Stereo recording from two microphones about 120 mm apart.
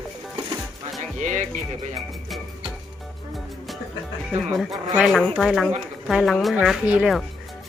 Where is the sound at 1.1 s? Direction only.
90° right.